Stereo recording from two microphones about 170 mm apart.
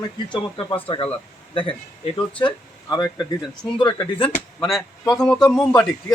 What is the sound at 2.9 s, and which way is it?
Speech, 25° left (ahead or behind).